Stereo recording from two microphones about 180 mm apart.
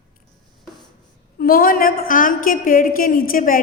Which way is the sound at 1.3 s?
55° left (ahead or behind).